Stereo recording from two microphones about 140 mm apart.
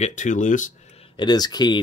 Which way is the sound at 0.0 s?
60° left (ahead or behind).